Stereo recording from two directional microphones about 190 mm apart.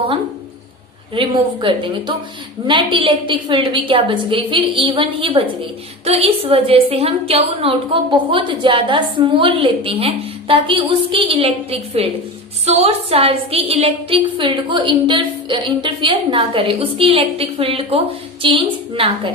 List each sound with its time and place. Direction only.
1.1 s a woman's voice: 25° right (ahead or behind)